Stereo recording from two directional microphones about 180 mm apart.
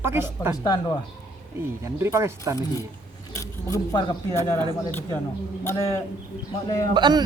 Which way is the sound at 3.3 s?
20° left (ahead or behind).